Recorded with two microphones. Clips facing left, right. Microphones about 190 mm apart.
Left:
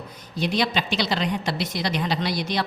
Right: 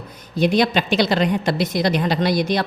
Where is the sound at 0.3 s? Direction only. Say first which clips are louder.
Right 7 dB; 50° right (ahead or behind).